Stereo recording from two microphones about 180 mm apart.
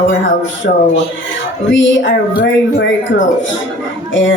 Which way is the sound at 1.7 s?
90° left.